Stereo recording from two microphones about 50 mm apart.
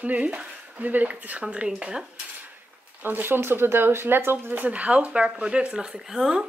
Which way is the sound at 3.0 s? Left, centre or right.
Right.